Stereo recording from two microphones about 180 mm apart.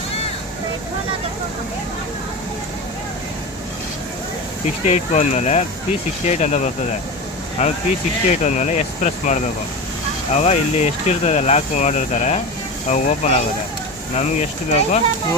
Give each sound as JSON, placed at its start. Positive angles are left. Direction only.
{"t": 4.9, "sound": "speech", "side_deg": 40}